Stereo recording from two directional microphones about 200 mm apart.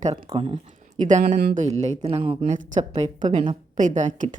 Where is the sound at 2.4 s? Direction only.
40° right (ahead or behind).